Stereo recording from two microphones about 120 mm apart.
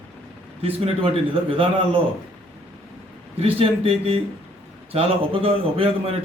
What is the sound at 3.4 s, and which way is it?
A man's voice, 50° right (ahead or behind).